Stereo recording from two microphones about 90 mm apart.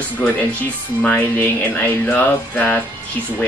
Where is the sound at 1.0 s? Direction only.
20° left (ahead or behind).